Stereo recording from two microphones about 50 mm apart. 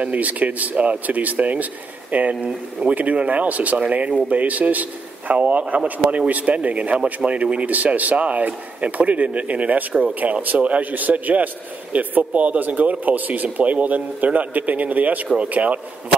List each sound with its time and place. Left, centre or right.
0.0 s a man's voice: right